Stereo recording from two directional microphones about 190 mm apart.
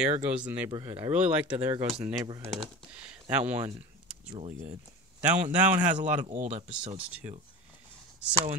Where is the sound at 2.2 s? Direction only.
20° right (ahead or behind).